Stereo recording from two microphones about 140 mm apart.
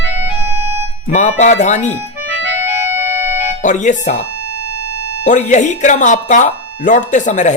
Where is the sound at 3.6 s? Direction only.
65° left (ahead or behind).